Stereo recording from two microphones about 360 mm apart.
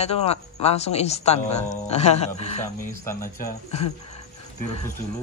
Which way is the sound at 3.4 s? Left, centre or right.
Left.